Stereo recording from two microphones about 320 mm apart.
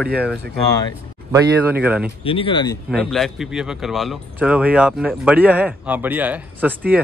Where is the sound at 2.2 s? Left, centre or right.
Centre.